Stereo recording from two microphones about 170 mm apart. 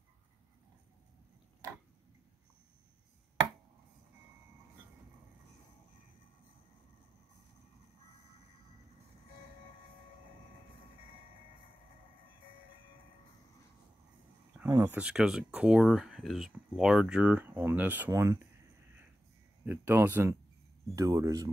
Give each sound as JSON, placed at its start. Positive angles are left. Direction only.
{"t": 14.7, "sound": "speech", "side_deg": -15}
{"t": 19.6, "sound": "speech", "side_deg": -10}